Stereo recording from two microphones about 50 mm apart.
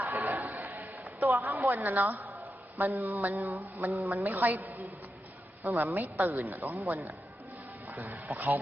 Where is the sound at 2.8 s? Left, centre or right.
Right.